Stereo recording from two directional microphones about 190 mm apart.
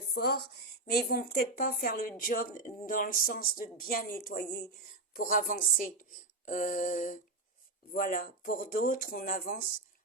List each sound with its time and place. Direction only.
0.1 s a woman's voice: 55° left (ahead or behind)